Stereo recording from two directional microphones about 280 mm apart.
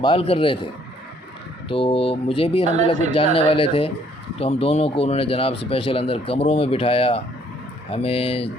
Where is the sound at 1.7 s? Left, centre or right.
Centre.